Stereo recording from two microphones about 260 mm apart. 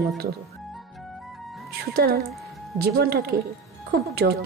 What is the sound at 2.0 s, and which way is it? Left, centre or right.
A woman's voice, right.